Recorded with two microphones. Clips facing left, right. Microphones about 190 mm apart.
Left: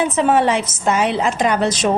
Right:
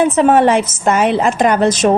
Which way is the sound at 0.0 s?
50° right (ahead or behind).